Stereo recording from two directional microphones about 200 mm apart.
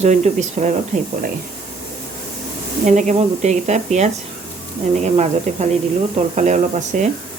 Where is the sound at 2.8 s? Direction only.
40° right (ahead or behind).